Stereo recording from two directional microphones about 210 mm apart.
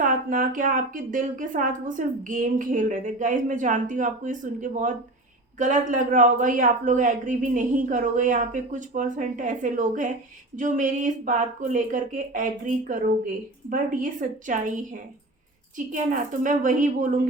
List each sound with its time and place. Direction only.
0.0 s speech: 40° right (ahead or behind)
15.9 s speech: 40° right (ahead or behind)